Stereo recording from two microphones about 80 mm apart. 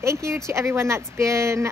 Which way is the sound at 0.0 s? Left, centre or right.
Right.